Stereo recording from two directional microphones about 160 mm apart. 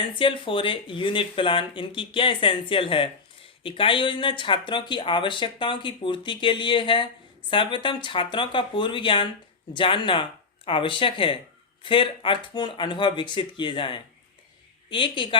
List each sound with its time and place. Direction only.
0.2 s speech: 30° left (ahead or behind)